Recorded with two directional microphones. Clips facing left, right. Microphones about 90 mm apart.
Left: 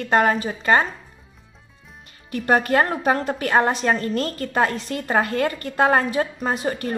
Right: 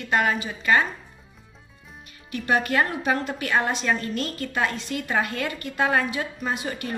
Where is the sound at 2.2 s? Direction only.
40° left (ahead or behind).